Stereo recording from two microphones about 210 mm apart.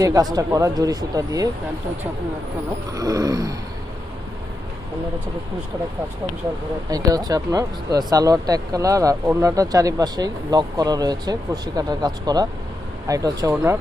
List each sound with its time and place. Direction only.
0.0 s speech: 15° right (ahead or behind)
2.9 s speech: 15° right (ahead or behind)
6.9 s speech: 20° right (ahead or behind)